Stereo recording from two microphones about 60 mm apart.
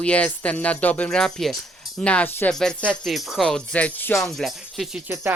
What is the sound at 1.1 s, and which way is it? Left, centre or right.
Speech, centre.